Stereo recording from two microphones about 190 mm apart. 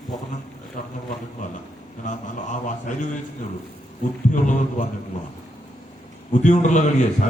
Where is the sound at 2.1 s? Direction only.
40° left (ahead or behind).